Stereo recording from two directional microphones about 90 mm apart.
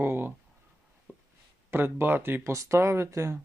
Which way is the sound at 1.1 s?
20° right (ahead or behind).